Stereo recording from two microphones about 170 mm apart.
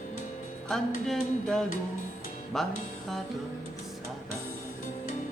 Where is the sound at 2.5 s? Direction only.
Centre (ahead or behind).